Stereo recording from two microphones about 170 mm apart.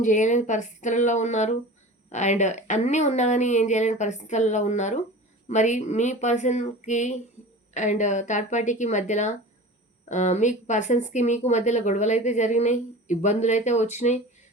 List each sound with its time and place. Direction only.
0.0 s speech: 45° left (ahead or behind)